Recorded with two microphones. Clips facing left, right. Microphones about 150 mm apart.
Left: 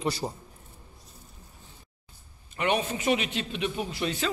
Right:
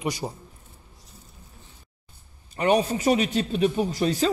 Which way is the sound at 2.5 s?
35° right (ahead or behind).